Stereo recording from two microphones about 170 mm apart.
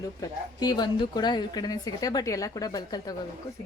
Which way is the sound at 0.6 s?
25° left (ahead or behind).